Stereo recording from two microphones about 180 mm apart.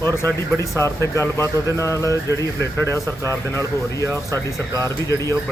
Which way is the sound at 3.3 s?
15° left (ahead or behind).